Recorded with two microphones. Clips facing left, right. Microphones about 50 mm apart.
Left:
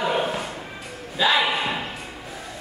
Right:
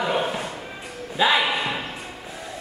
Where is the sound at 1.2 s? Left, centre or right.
Centre.